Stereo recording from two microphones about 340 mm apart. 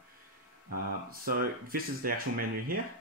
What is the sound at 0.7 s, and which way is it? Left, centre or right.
Speech, right.